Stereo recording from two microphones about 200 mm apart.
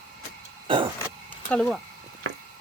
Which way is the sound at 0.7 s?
25° right (ahead or behind).